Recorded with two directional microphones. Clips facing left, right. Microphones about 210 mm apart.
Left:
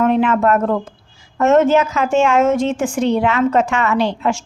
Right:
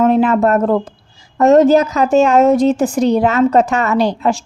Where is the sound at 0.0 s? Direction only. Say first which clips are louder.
Right 3 dB; 35° right (ahead or behind).